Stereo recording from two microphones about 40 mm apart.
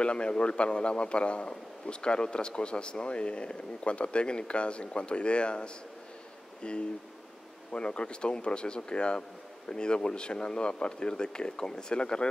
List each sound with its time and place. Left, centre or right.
0.0 s speech: left